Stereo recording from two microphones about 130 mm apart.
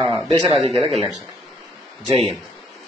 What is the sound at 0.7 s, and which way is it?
Speech, centre (ahead or behind).